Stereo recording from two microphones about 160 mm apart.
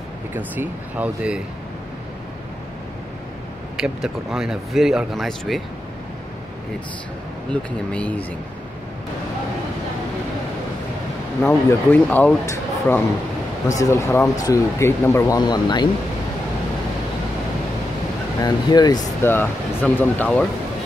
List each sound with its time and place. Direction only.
0.3 s speech: 10° right (ahead or behind)
3.7 s speech: 5° right (ahead or behind)
7.9 s speech: 10° left (ahead or behind)
11.4 s speech: 10° left (ahead or behind); by 15.9 s 25° left (ahead or behind)
18.4 s speech: 25° left (ahead or behind)
19.2 s speech: 15° left (ahead or behind)